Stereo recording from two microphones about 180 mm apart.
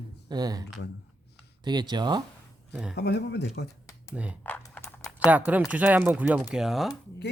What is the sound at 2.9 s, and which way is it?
Speech, 65° left (ahead or behind).